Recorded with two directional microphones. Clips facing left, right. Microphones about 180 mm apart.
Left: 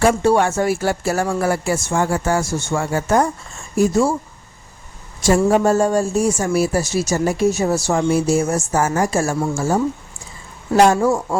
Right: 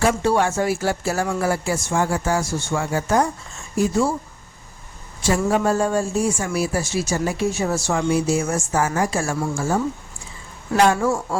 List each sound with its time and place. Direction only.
0.0 s speech: 50° left (ahead or behind)
5.2 s speech: 45° left (ahead or behind)
10.9 s speech: 20° left (ahead or behind)